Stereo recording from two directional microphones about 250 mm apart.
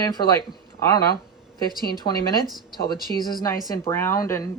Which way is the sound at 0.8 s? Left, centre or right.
Centre.